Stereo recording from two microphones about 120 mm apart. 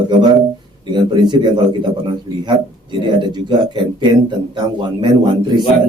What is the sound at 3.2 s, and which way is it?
A man's voice, 40° right (ahead or behind).